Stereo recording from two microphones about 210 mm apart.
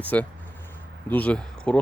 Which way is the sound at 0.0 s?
5° left (ahead or behind).